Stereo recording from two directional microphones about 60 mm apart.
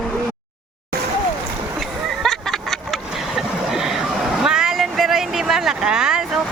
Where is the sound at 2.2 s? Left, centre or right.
Centre.